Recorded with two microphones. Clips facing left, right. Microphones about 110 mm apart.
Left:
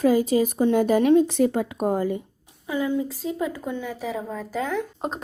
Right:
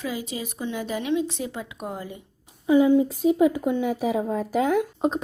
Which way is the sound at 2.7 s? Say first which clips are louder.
Right 7 dB; 20° right (ahead or behind).